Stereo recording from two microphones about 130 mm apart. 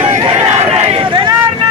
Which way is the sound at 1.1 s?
35° right (ahead or behind).